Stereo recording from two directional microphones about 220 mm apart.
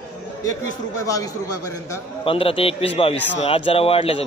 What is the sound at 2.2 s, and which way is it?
A man's voice, 25° left (ahead or behind).